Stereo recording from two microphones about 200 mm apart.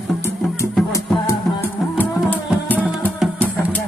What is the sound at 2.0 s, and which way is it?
Music, 10° left (ahead or behind).